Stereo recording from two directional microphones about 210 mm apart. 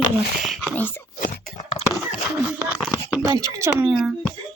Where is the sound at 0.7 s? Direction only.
10° left (ahead or behind).